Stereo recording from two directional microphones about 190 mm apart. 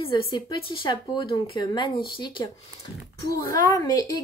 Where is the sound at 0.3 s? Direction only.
25° left (ahead or behind).